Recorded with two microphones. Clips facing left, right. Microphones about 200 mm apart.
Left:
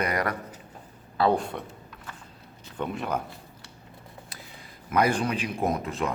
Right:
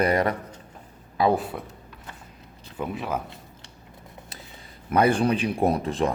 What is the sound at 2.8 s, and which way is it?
Speech, centre (ahead or behind).